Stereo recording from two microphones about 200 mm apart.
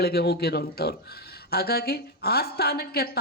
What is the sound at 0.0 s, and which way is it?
Speech, 50° left (ahead or behind).